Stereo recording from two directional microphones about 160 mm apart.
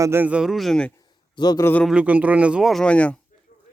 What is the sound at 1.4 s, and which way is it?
Speech, 25° left (ahead or behind).